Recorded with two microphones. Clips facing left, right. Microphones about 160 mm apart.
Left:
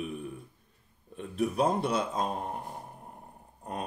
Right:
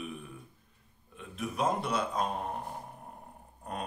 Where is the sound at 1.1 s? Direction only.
35° left (ahead or behind).